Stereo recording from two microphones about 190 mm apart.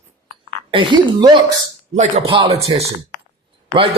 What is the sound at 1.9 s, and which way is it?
Speech, 40° right (ahead or behind).